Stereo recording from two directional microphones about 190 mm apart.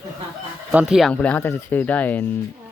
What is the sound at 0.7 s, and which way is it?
Speech, 5° right (ahead or behind).